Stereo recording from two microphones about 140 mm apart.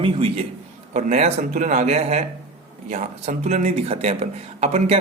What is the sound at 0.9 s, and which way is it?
Speech, 55° right (ahead or behind).